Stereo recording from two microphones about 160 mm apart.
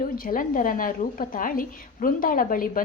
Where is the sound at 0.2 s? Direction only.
60° left (ahead or behind).